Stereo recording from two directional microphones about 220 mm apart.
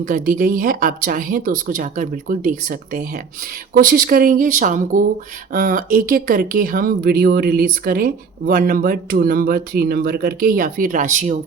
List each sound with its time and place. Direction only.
0.0 s speech: 40° right (ahead or behind)